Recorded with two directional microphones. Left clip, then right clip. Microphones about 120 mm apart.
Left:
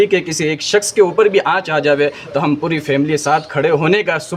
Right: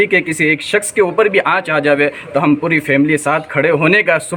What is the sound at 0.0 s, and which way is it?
Speech, 25° left (ahead or behind).